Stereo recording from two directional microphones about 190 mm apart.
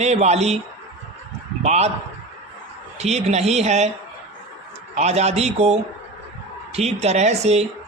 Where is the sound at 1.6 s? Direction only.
35° right (ahead or behind).